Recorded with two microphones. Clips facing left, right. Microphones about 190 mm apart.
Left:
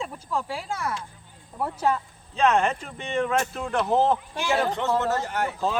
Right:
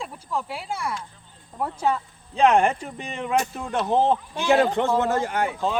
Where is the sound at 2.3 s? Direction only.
30° right (ahead or behind).